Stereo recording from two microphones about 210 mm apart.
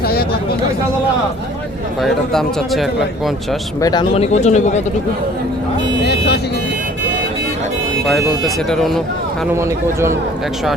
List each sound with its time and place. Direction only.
0.0 s a sound: 45° left (ahead or behind)
2.0 s a man's voice: centre (ahead or behind)
3.8 s speech: 20° left (ahead or behind)
6.1 s speech: 50° left (ahead or behind)
8.0 s a man's voice: centre (ahead or behind)
9.6 s a man's voice: 15° right (ahead or behind)